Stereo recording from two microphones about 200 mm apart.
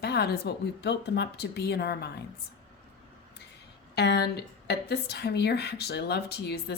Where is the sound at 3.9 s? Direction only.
55° left (ahead or behind).